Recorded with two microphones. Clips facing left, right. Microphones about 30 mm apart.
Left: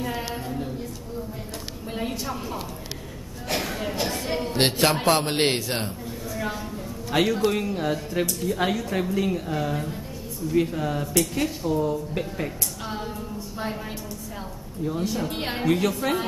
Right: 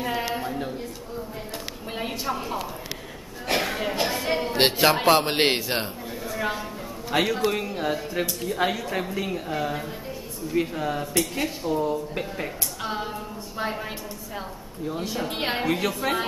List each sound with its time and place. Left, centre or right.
0.0 s a sound: centre
2.0 s speech: centre
3.4 s a sound: right
4.6 s speech: centre
14.9 s speech: centre
15.7 s speech: centre